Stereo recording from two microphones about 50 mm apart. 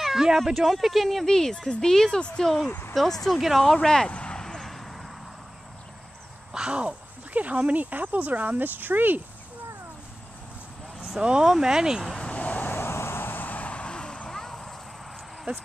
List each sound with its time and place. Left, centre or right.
0.0 s a sound: centre
0.5 s speech: centre
2.4 s speech: centre
3.7 s speech: centre
4.1 s a sound: left
4.4 s vehicle: centre
6.5 s speech: centre; by 9.2 s right
11.1 s speech: centre
12.0 s speech: centre
12.3 s vehicle: left
12.7 s vehicle: left
14.3 s vehicle: centre
15.5 s speech: right